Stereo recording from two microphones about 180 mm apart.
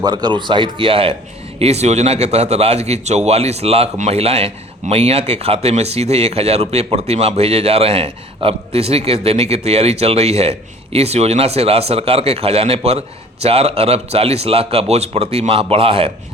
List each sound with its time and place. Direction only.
0.0 s a man's voice: 25° right (ahead or behind)